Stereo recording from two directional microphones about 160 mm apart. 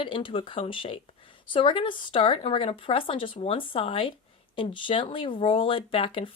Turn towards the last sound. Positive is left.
turn(degrees=35)  # may be behind; listen again after turning